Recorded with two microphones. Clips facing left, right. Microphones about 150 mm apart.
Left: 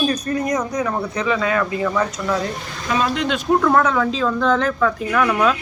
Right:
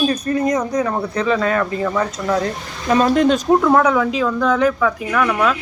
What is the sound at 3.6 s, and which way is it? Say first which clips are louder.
Speech: right 2 dB; 15° right (ahead or behind).